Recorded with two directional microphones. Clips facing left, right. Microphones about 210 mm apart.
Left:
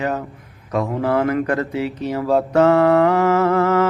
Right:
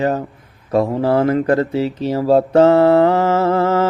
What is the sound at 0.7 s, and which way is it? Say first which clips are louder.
Mantra: right 4 dB; 30° right (ahead or behind).